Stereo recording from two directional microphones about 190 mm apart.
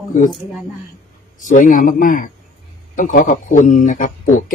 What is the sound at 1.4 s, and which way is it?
Speech, 40° left (ahead or behind).